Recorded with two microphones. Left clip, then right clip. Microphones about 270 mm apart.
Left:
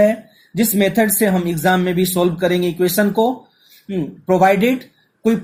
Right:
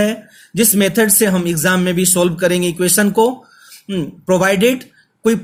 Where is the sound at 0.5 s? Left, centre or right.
Right.